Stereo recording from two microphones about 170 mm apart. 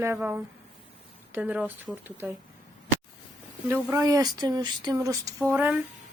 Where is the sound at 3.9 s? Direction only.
20° right (ahead or behind).